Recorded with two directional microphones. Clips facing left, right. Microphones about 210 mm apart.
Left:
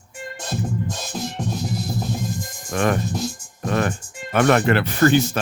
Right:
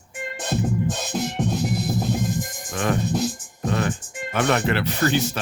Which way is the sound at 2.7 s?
60° left (ahead or behind).